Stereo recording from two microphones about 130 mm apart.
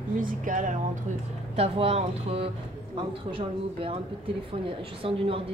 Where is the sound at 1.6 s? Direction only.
50° right (ahead or behind).